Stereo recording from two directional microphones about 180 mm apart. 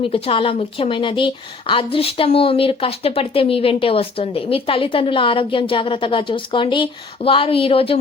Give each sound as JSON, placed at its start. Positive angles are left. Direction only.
{"t": 0.0, "sound": "speech", "side_deg": 30}